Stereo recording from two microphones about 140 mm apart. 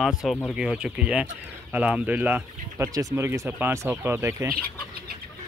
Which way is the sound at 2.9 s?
25° right (ahead or behind).